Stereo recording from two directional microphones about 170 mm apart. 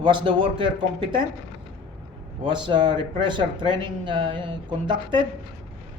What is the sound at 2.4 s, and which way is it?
Speech, 25° right (ahead or behind).